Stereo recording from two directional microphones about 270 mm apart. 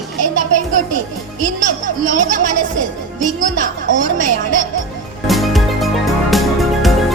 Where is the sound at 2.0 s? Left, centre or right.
Right.